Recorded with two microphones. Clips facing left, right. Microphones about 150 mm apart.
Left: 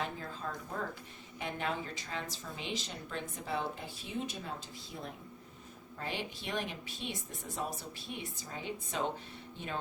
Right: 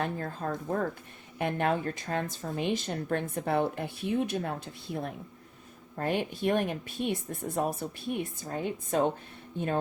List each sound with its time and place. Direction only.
0.0 s speech: 55° right (ahead or behind)